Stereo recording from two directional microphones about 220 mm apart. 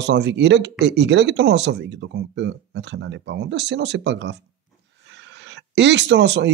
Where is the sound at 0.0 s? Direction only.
55° right (ahead or behind).